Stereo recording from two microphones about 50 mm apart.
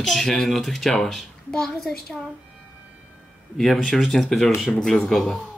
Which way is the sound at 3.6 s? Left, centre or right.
Centre.